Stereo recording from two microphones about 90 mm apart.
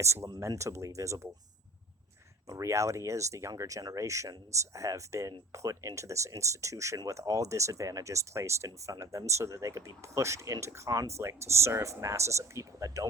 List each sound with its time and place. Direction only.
0.0 s speech: 30° right (ahead or behind)
2.5 s speech: 35° right (ahead or behind)